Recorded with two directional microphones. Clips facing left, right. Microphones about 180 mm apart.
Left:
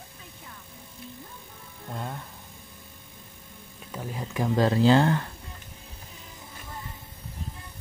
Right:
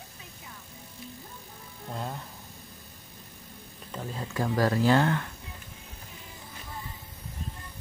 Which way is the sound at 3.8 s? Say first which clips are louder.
Left 1 dB; 10° left (ahead or behind).